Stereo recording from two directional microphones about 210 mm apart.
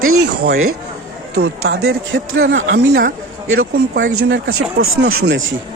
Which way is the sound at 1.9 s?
70° right (ahead or behind).